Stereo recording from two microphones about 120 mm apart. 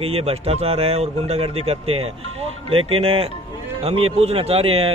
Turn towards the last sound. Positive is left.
turn(degrees=-55)  # may be behind; listen again after turning